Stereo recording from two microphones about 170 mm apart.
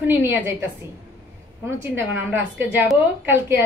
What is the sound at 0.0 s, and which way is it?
Speech, 10° right (ahead or behind).